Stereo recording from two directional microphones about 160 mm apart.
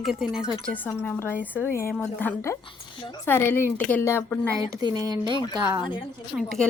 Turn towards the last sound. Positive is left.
turn(degrees=5)  # may be behind; listen again after turning